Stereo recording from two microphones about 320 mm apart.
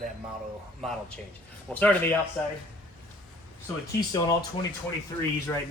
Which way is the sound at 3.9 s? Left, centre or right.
Centre.